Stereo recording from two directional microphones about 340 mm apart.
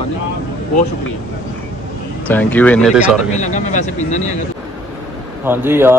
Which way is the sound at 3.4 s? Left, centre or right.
Left.